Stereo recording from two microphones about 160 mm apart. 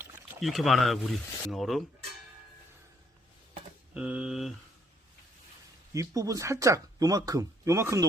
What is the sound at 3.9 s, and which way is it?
Speech, 5° right (ahead or behind).